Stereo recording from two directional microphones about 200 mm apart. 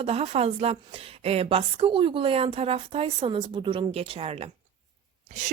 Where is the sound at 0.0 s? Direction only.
30° right (ahead or behind).